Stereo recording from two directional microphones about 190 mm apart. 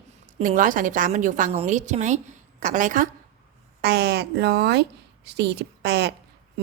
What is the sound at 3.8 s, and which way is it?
Speech, 55° right (ahead or behind).